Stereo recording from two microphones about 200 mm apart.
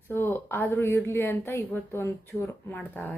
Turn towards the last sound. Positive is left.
turn(degrees=10)  # may be behind; listen again after turning